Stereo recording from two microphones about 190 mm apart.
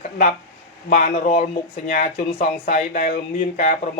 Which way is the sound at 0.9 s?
45° left (ahead or behind).